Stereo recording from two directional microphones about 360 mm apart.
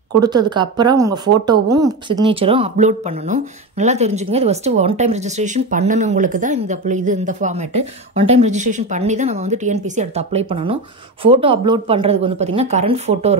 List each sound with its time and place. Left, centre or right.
0.2 s speech: centre